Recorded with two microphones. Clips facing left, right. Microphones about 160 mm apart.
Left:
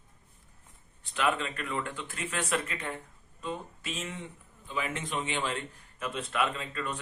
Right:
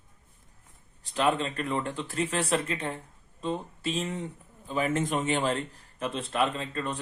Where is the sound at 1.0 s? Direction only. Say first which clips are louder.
Right 4 dB; 35° right (ahead or behind).